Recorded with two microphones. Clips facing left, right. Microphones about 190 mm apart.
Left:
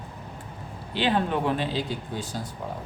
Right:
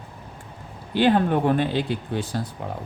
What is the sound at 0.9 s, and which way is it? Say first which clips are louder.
Speech: right 6 dB; 50° right (ahead or behind).